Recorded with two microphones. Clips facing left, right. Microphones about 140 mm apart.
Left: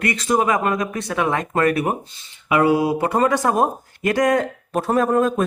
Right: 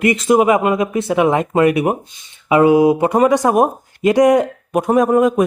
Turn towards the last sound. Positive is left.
turn(degrees=-15)  # may be behind; listen again after turning